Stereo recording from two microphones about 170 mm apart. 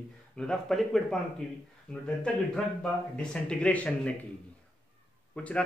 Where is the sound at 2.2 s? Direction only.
5° left (ahead or behind).